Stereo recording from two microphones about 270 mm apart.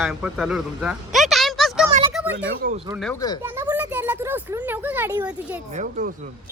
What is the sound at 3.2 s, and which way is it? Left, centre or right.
Speech, centre.